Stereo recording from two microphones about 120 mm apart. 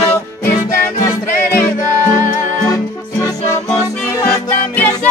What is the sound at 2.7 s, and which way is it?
Music, 30° left (ahead or behind).